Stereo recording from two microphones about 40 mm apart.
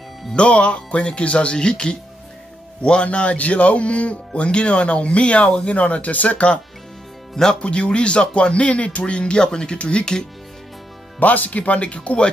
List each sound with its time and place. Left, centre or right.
0.3 s a man's voice: left
5.8 s speech: left
7.6 s a man's voice: left
11.1 s speech: left